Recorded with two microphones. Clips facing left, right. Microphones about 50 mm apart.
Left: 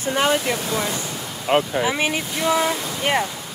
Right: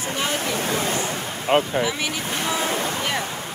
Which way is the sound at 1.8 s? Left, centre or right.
Left.